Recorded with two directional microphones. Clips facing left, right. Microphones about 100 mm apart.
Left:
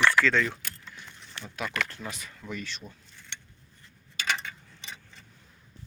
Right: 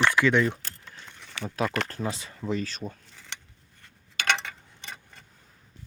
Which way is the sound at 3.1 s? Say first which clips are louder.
Right 4 dB; 90° right.